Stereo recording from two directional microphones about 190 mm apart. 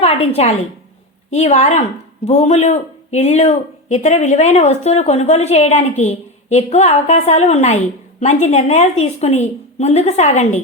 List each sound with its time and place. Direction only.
0.0 s a woman's voice: 35° left (ahead or behind)